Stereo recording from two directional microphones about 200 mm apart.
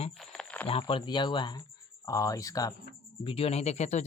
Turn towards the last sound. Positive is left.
turn(degrees=35)  # may be behind; listen again after turning